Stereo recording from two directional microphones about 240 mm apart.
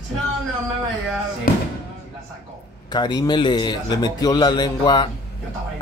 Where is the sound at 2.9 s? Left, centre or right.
Centre.